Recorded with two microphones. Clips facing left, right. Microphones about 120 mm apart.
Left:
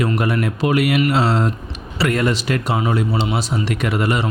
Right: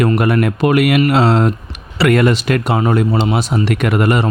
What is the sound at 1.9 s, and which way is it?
Speech, 70° right (ahead or behind).